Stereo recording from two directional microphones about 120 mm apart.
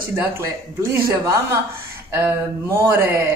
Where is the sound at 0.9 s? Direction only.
25° right (ahead or behind).